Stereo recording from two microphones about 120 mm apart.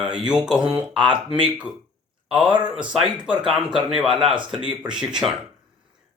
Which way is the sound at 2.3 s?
10° right (ahead or behind).